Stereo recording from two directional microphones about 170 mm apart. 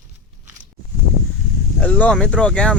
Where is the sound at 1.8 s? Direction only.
5° left (ahead or behind).